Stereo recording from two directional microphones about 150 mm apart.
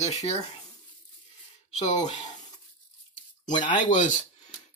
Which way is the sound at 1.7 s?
50° left (ahead or behind).